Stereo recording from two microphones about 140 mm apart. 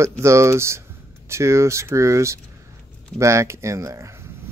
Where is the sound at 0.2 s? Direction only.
20° right (ahead or behind).